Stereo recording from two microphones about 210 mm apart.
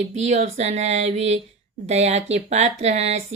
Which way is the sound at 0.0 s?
35° right (ahead or behind).